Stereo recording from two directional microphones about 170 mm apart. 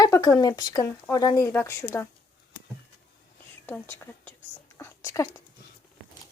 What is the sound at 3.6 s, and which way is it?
Whispering, 10° left (ahead or behind).